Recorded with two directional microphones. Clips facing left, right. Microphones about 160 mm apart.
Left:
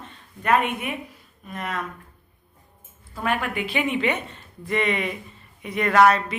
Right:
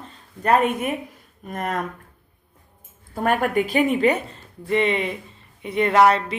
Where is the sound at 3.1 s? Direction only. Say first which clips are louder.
Right 5 dB; 45° right (ahead or behind).